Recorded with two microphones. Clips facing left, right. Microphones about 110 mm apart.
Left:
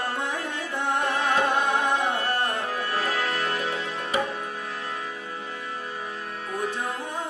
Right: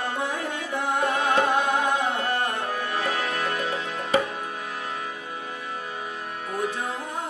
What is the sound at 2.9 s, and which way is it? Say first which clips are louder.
Music: left 1 dB; 15° right (ahead or behind).